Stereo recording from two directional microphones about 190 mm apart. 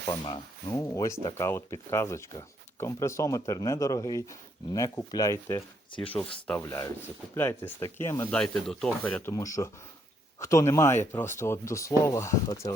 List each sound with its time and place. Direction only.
0.1 s speech: 25° left (ahead or behind)
8.4 s speech: 5° left (ahead or behind)